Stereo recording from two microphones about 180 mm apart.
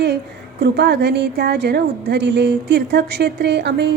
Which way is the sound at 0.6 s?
70° right (ahead or behind).